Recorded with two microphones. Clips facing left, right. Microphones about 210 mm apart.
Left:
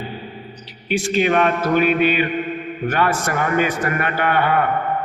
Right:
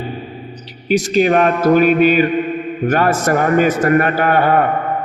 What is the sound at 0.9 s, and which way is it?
A man's voice, 40° right (ahead or behind).